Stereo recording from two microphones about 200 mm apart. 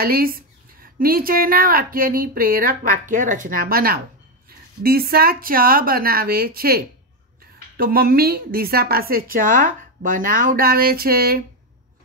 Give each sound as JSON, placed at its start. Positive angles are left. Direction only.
{"t": 0.0, "sound": "speech", "side_deg": -45}